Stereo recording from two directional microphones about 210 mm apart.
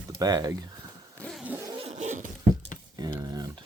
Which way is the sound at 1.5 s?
15° right (ahead or behind).